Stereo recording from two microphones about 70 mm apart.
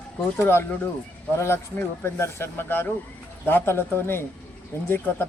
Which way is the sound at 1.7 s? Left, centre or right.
Left.